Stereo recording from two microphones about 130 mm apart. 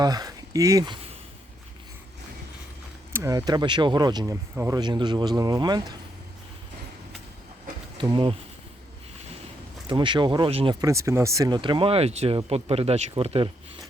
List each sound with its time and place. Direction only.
0.0 s speech: 30° right (ahead or behind)
3.1 s speech: 20° right (ahead or behind)
7.9 s speech: 35° right (ahead or behind)
9.8 s speech: 40° right (ahead or behind)
10.8 s speech: 25° right (ahead or behind); by 13.5 s 50° right (ahead or behind)